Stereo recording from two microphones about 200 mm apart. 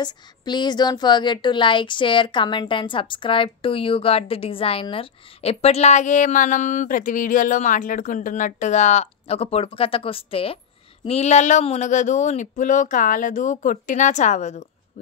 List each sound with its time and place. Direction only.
0.0 s speech: 20° left (ahead or behind)